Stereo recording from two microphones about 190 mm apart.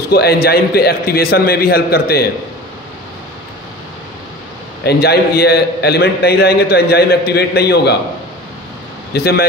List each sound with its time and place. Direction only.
0.1 s a man's voice: 55° left (ahead or behind)
4.8 s a man's voice: 55° left (ahead or behind)
9.1 s a man's voice: 55° left (ahead or behind)